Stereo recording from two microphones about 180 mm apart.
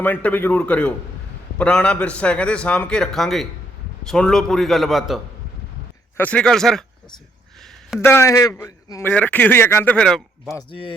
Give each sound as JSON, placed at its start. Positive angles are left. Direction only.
{"t": 0.0, "sound": "a man's voice", "side_deg": 10}
{"t": 8.0, "sound": "a man's voice", "side_deg": 15}
{"t": 10.7, "sound": "speech", "side_deg": 30}